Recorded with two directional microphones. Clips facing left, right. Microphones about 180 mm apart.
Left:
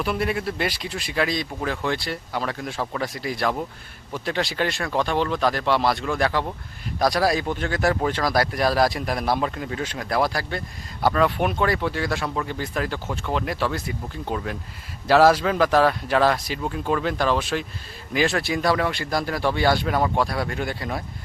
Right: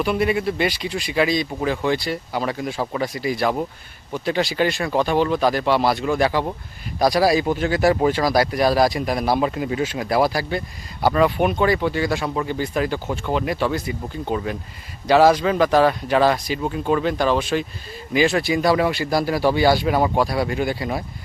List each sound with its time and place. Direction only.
0.0 s speech: centre (ahead or behind)